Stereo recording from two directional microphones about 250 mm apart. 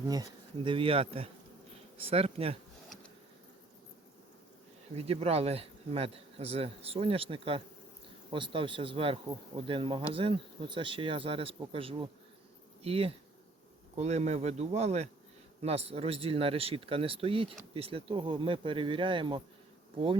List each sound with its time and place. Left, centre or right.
0.1 s speech: centre
4.9 s speech: right